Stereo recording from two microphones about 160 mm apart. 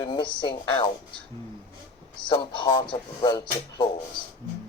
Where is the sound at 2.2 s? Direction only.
30° left (ahead or behind).